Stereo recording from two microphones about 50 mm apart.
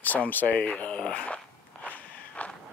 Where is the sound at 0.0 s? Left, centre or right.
Left.